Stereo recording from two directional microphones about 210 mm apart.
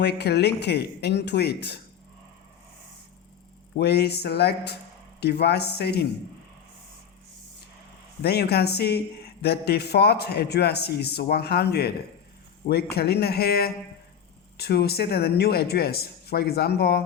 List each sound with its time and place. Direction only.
0.0 s speech: 50° left (ahead or behind)
3.8 s speech: 50° left (ahead or behind)
8.2 s speech: 50° left (ahead or behind)